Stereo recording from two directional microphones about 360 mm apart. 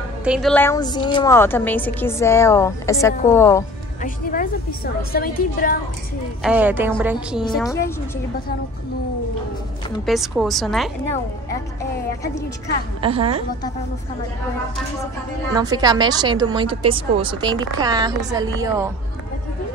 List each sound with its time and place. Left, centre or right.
0.2 s a woman's voice: centre
4.0 s a woman's voice: left
6.4 s a woman's voice: centre
7.5 s a woman's voice: centre
10.0 s a woman's voice: centre
13.0 s a woman's voice: centre
15.5 s a woman's voice: centre